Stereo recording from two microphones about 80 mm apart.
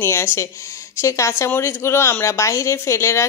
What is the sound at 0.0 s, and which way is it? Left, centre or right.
Speech, left.